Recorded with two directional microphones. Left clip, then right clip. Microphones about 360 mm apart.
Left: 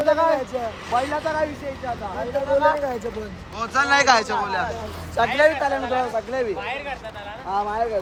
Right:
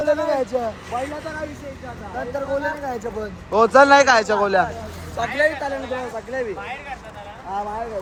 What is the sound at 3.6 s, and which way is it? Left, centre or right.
A man's voice, centre.